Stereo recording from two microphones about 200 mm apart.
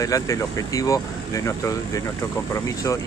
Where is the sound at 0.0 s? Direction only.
15° left (ahead or behind).